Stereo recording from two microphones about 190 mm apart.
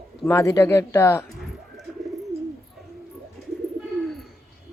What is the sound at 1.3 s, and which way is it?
Bird, centre (ahead or behind).